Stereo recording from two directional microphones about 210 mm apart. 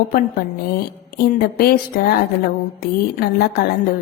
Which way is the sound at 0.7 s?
45° left (ahead or behind).